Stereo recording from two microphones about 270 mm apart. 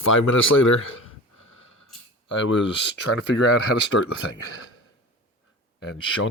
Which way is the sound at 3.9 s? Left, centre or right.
Left.